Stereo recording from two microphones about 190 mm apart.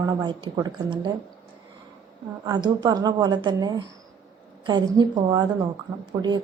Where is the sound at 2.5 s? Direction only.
25° right (ahead or behind).